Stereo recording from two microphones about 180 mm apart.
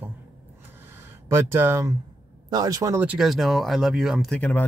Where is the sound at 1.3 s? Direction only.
15° right (ahead or behind).